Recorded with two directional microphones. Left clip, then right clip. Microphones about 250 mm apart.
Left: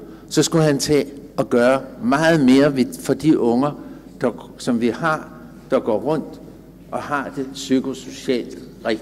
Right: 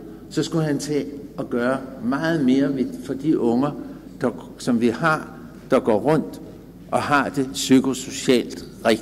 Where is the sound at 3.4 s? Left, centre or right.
Centre.